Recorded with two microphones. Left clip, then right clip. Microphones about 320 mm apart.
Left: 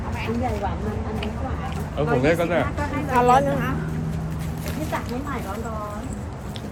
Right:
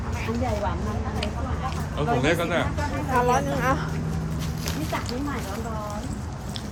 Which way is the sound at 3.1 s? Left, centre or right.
Left.